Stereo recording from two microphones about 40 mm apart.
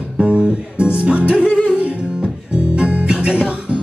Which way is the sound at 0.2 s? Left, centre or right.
Right.